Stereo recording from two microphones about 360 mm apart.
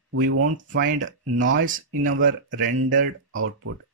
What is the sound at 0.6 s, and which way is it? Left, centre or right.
Speech, right.